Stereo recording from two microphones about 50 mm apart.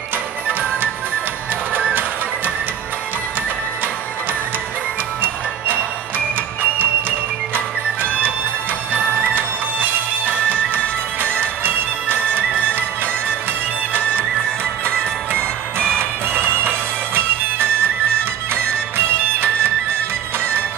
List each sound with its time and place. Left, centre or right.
0.5 s music: right
6.6 s music: right
14.9 s music: centre
16.0 s music: right